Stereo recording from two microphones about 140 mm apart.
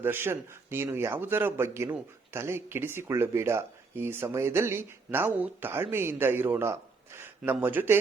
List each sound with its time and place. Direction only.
0.0 s a man's voice: 15° right (ahead or behind)